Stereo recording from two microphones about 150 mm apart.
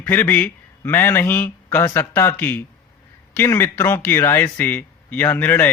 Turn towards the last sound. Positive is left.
turn(degrees=10)  # may be behind; listen again after turning